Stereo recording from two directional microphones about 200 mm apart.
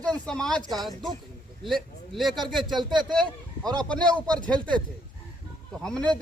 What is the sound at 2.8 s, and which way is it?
Speech, 20° right (ahead or behind).